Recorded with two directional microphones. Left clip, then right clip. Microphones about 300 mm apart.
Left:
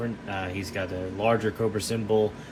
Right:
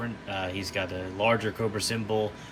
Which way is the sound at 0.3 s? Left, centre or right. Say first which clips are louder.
Even; centre.